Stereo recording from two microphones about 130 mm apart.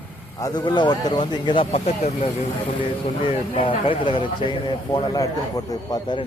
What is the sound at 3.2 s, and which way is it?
Speech, 45° left (ahead or behind).